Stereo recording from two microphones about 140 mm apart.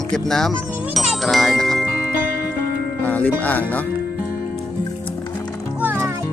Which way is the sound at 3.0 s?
10° left (ahead or behind).